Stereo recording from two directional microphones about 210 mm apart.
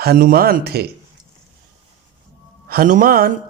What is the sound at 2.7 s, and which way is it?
Speech, 40° right (ahead or behind).